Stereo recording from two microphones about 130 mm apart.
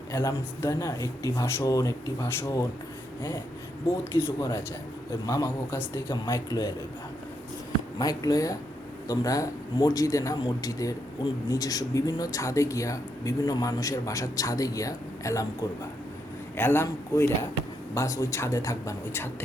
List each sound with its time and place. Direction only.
0.1 s speech: 20° left (ahead or behind)
4.1 s speech: 20° left (ahead or behind)
7.9 s speech: 30° left (ahead or behind)
16.6 s speech: 15° left (ahead or behind)